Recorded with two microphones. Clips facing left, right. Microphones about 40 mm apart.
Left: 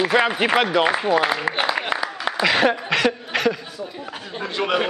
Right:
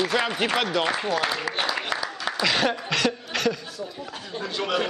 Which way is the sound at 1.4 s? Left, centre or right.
Left.